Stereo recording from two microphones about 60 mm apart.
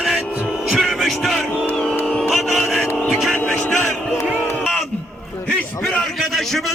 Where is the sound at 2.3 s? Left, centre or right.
Centre.